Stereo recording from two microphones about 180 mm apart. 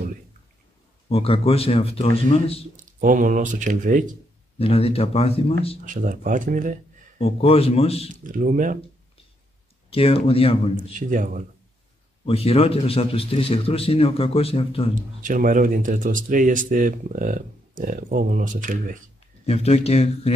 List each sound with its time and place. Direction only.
1.0 s a man's voice: 30° left (ahead or behind)
2.7 s speech: 45° right (ahead or behind)
4.6 s a man's voice: 35° left (ahead or behind)
5.9 s speech: 45° right (ahead or behind)
7.2 s a man's voice: 30° left (ahead or behind)
8.1 s speech: 45° right (ahead or behind)
9.8 s a man's voice: 30° left (ahead or behind)
10.8 s speech: 45° right (ahead or behind)
12.3 s a man's voice: 35° left (ahead or behind)
15.2 s speech: 50° right (ahead or behind)
19.4 s a man's voice: 35° left (ahead or behind)